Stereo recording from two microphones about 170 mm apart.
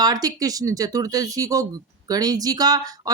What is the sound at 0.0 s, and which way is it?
Speech, 20° right (ahead or behind).